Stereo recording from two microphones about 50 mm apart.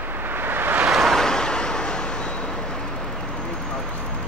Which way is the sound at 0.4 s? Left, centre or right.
Right.